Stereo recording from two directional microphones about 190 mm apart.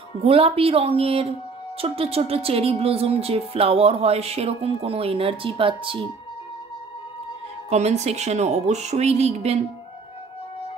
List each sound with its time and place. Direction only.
0.2 s speech: 30° right (ahead or behind)
7.7 s speech: 35° right (ahead or behind)